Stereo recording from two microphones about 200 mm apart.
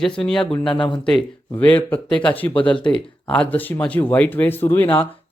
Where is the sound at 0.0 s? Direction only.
5° left (ahead or behind).